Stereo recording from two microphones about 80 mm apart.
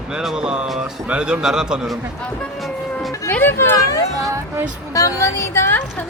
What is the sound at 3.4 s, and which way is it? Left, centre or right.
Speech, left.